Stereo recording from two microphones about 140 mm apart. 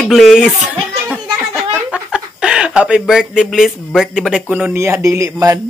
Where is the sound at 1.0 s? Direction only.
Centre (ahead or behind).